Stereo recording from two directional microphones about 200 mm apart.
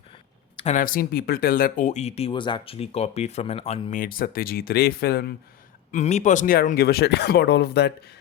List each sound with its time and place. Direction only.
0.5 s speech: 35° left (ahead or behind); by 5.3 s 50° left (ahead or behind)
5.9 s speech: 35° left (ahead or behind); by 8.1 s 55° left (ahead or behind)